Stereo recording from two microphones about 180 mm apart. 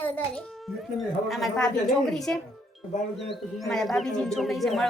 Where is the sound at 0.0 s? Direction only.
5° left (ahead or behind).